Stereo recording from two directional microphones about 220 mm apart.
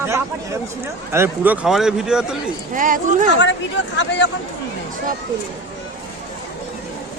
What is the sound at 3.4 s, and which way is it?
Speech, 55° left (ahead or behind).